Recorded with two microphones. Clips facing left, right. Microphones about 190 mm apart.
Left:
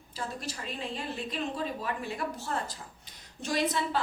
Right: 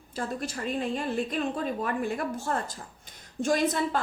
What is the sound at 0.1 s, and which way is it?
A woman's voice, 50° right (ahead or behind).